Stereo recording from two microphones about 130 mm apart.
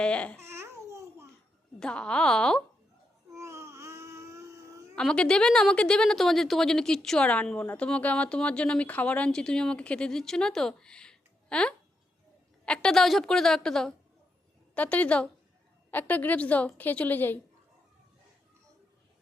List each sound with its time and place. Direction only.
0.0 s a woman's voice: 10° left (ahead or behind)
0.4 s babbling: 20° right (ahead or behind)
1.8 s a woman's voice: 5° left (ahead or behind)
3.3 s babbling: 20° right (ahead or behind)
4.9 s a woman's voice: 5° left (ahead or behind)